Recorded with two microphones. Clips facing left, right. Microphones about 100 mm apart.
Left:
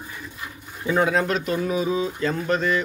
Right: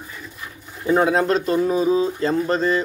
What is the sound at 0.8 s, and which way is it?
A man's voice, 35° right (ahead or behind).